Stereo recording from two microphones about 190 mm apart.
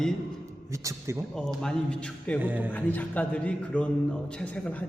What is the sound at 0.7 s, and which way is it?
Speech, 15° right (ahead or behind).